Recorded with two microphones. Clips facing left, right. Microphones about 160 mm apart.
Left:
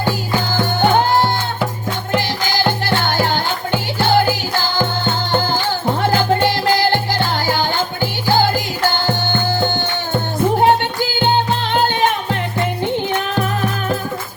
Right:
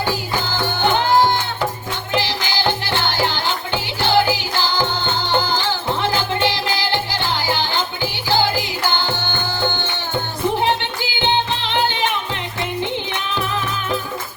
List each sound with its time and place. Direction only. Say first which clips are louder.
2.1 s music: left 2 dB; 45° left (ahead or behind)
10.6 s music: left 6 dB; 45° left (ahead or behind)